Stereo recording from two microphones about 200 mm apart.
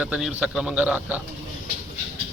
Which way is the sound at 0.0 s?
5° right (ahead or behind).